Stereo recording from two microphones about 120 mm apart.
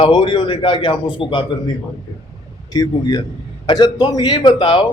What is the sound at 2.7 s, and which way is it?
A man's voice, 35° left (ahead or behind).